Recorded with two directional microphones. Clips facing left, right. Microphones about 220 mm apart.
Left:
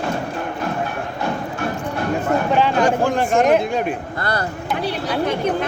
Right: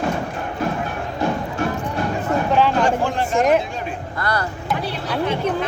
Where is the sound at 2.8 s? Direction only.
45° left (ahead or behind).